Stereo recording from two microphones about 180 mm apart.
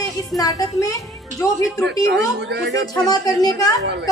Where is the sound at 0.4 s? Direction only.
20° left (ahead or behind).